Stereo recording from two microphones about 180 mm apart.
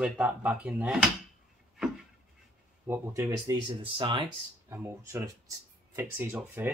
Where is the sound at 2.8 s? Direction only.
10° right (ahead or behind).